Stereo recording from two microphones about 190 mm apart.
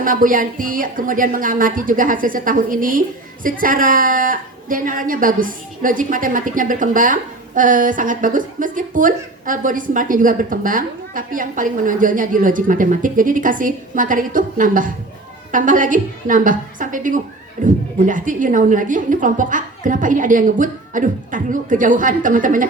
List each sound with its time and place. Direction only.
0.0 s a woman's voice: 45° right (ahead or behind)